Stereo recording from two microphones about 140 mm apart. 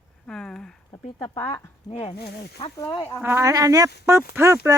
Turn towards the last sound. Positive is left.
turn(degrees=-20)  # may be behind; listen again after turning